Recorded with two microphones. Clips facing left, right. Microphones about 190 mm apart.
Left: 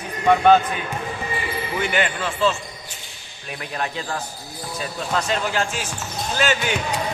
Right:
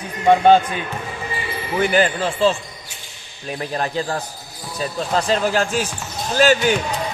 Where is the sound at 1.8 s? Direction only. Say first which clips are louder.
Right 7 dB; 35° right (ahead or behind).